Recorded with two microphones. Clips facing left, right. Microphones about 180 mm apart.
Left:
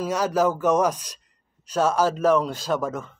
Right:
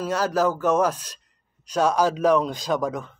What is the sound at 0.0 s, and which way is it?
Speech, 10° left (ahead or behind).